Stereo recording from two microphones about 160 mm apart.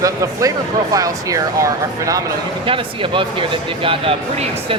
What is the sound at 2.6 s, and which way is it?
Speech, 35° right (ahead or behind).